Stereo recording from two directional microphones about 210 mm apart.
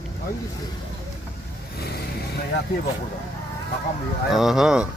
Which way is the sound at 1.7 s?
50° left (ahead or behind).